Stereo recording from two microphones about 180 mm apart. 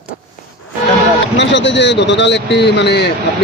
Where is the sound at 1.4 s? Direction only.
80° left.